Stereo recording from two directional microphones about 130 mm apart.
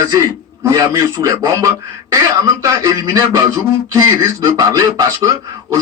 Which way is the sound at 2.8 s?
25° right (ahead or behind).